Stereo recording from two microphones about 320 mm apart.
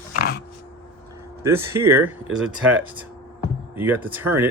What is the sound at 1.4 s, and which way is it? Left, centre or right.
Speech, centre.